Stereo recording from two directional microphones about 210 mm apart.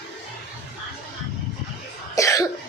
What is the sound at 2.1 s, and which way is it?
Cough, 15° left (ahead or behind).